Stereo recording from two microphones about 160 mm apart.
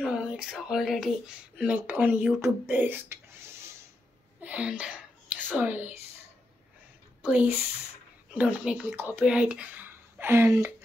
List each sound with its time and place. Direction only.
0.0 s speech: 5° right (ahead or behind)
4.4 s a sound: 10° right (ahead or behind)
5.6 s speech: 10° right (ahead or behind)
7.2 s speech: 10° right (ahead or behind)